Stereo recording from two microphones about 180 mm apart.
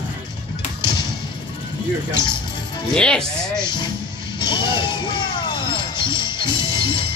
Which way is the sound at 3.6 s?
25° left (ahead or behind).